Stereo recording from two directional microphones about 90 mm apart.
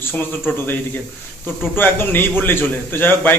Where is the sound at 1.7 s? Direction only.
25° left (ahead or behind).